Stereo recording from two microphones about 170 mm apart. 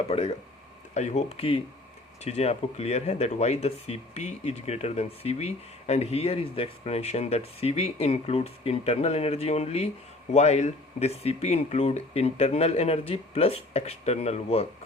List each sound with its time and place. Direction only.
0.1 s speech: 35° left (ahead or behind)